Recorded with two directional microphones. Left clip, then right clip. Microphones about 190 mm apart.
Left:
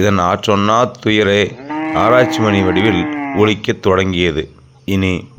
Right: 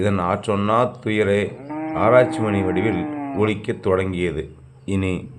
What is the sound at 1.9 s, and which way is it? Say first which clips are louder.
Speech: left 4 dB; 35° left (ahead or behind).